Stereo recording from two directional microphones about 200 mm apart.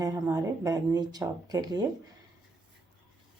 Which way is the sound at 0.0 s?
15° right (ahead or behind).